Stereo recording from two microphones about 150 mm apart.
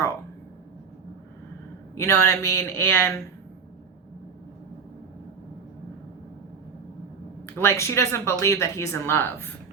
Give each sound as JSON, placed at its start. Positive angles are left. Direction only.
{"t": 2.0, "sound": "a man's voice", "side_deg": 15}
{"t": 7.4, "sound": "speech", "side_deg": 15}